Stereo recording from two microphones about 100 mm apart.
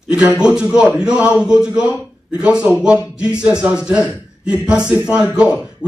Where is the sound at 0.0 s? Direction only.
10° right (ahead or behind).